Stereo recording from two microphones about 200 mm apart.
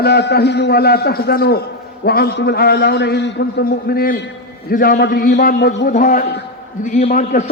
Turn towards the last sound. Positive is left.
turn(degrees=40)  # may be behind; listen again after turning